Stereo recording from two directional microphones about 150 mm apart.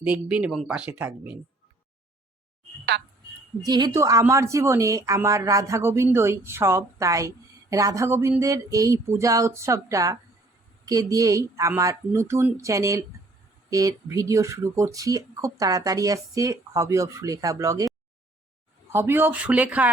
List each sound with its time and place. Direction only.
0.0 s speech: 10° right (ahead or behind)
3.7 s a woman's voice: 25° right (ahead or behind); by 19.9 s 10° right (ahead or behind)